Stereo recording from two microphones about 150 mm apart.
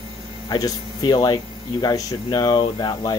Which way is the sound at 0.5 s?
25° left (ahead or behind).